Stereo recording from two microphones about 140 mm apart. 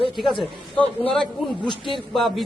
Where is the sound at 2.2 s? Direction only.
Centre (ahead or behind).